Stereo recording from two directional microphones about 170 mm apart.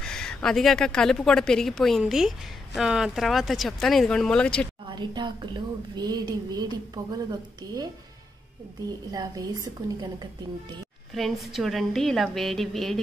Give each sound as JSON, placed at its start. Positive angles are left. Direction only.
{"t": 0.0, "sound": "speech", "side_deg": 5}
{"t": 4.8, "sound": "a woman's voice", "side_deg": -25}
{"t": 11.1, "sound": "speech", "side_deg": 0}